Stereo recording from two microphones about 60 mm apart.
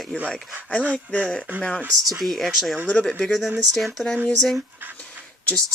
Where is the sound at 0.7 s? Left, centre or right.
Centre.